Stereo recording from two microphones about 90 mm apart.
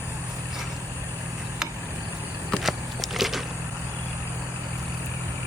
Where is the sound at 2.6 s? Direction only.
Centre (ahead or behind).